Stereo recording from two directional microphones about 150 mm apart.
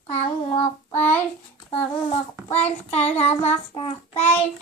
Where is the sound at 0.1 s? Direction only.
40° left (ahead or behind).